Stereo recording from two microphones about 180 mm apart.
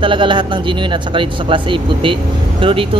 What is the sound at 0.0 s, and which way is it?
Speech, 25° right (ahead or behind).